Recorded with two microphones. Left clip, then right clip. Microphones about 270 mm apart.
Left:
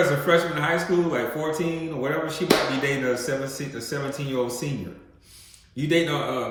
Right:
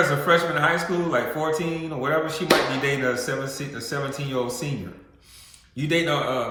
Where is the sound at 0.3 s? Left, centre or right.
Centre.